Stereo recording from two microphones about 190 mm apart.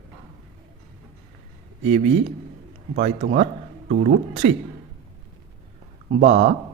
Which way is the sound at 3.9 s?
55° right (ahead or behind).